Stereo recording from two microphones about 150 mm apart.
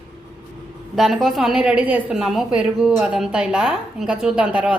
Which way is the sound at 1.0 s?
Centre (ahead or behind).